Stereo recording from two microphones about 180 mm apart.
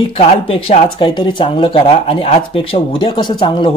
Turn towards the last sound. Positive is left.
turn(degrees=25)  # may be behind; listen again after turning